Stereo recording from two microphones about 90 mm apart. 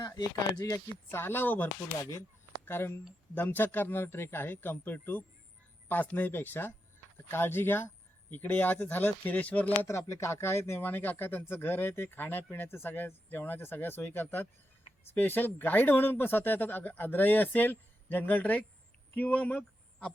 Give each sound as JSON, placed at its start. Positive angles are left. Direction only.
{"t": 0.2, "sound": "speech", "side_deg": 45}
{"t": 1.1, "sound": "speech", "side_deg": 25}
{"t": 2.0, "sound": "speech", "side_deg": 35}
{"t": 9.8, "sound": "speech", "side_deg": 30}